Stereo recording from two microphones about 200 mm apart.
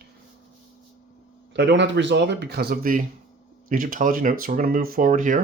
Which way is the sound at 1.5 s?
60° right (ahead or behind).